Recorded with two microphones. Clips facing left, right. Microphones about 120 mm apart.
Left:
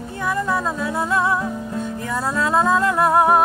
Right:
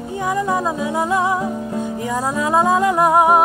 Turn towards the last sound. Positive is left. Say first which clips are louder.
# right 2 dB
turn(degrees=-15)  # may be behind; listen again after turning